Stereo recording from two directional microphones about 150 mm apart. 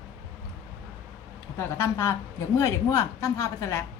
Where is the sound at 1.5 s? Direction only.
15° left (ahead or behind).